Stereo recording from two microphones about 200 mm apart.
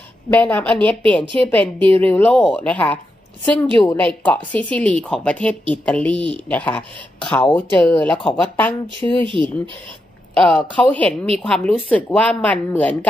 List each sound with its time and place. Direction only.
0.3 s a woman's voice: 10° left (ahead or behind)
9.2 s speech: 25° right (ahead or behind)
10.3 s a woman's voice: 5° left (ahead or behind)